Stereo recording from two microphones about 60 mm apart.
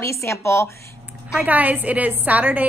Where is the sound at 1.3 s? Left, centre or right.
Right.